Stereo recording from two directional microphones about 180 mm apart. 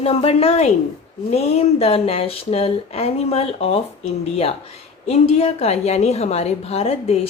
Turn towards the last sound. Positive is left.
turn(degrees=35)  # may be behind; listen again after turning